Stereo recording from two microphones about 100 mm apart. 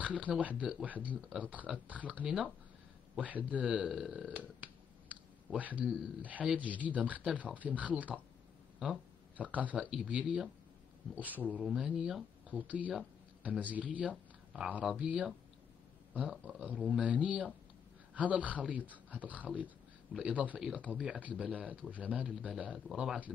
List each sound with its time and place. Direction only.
0.0 s speech: 15° right (ahead or behind)
9.4 s speech: 15° right (ahead or behind)